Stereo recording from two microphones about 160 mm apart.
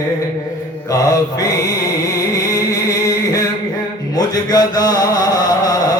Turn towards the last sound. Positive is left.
turn(degrees=25)  # may be behind; listen again after turning